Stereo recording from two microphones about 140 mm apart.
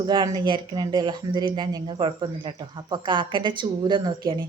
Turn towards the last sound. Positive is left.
turn(degrees=-30)  # may be behind; listen again after turning